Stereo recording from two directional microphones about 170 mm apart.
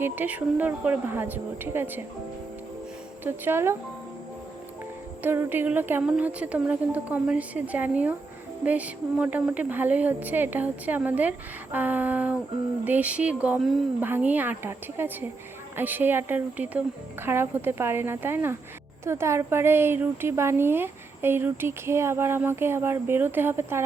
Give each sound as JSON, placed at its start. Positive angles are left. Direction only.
{"t": 0.0, "sound": "a woman's voice", "side_deg": -10}
{"t": 3.2, "sound": "a woman's voice", "side_deg": -15}
{"t": 5.2, "sound": "a woman's voice", "side_deg": -10}